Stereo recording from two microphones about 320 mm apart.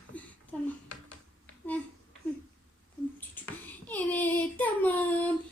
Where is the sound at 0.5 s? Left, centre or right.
Centre.